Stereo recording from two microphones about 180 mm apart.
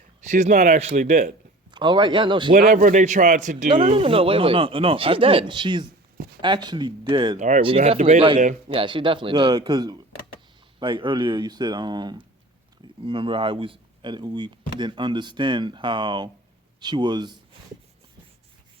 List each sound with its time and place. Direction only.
0.3 s speech: 40° right (ahead or behind)
1.7 s speech: 25° right (ahead or behind)
2.5 s speech: 55° right (ahead or behind)
3.7 s speech: 30° right (ahead or behind)
7.3 s speech: 45° right (ahead or behind)
7.6 s speech: 30° right (ahead or behind)
8.7 s speech: 30° right (ahead or behind)